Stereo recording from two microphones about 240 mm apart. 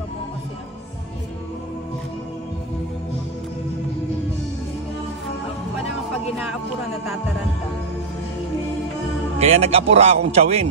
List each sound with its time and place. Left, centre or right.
9.4 s a man's voice: right